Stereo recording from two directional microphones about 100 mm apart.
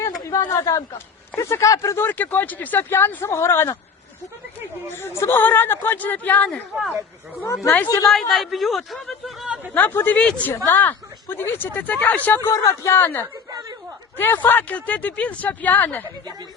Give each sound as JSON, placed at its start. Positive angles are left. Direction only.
{"t": 0.3, "sound": "a man's voice", "side_deg": 35}
{"t": 2.0, "sound": "speech", "side_deg": 20}
{"t": 4.9, "sound": "a man's voice", "side_deg": 25}
{"t": 8.1, "sound": "speech", "side_deg": 0}
{"t": 9.7, "sound": "speech", "side_deg": 20}
{"t": 12.5, "sound": "a man's voice", "side_deg": 35}
{"t": 12.9, "sound": "speech", "side_deg": 20}
{"t": 13.3, "sound": "chatter", "side_deg": -40}
{"t": 14.2, "sound": "speech", "side_deg": 20}